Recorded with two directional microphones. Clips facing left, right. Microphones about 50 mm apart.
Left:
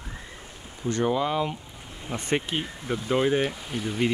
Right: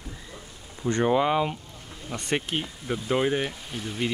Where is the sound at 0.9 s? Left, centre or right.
Right.